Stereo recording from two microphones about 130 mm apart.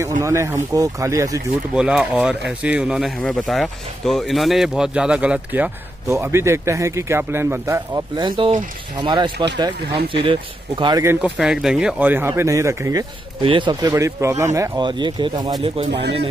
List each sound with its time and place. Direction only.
0.2 s speech: 25° right (ahead or behind)
1.8 s speech: 5° right (ahead or behind)
3.2 s speech: 5° left (ahead or behind); by 8.0 s 20° right (ahead or behind)
8.2 s speech: 35° right (ahead or behind)
11.1 s speech: 5° right (ahead or behind); by 13.0 s 25° right (ahead or behind)
13.4 s speech: 40° right (ahead or behind); by 14.7 s 25° right (ahead or behind)
14.8 s speech: 35° right (ahead or behind)